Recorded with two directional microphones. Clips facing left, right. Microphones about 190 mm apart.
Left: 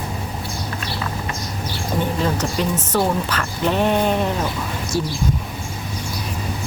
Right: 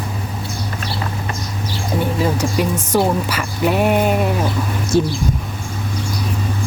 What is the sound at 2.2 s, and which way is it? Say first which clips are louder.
Speech: right 3 dB; 10° right (ahead or behind).